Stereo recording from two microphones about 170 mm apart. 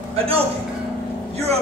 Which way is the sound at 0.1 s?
35° right (ahead or behind).